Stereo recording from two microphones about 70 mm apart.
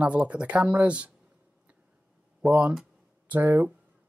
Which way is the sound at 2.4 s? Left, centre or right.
Centre.